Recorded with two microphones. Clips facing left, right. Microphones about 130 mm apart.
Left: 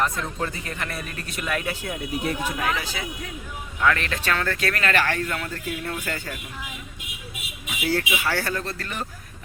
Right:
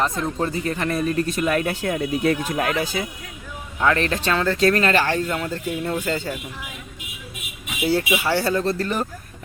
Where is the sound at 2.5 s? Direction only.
45° right (ahead or behind).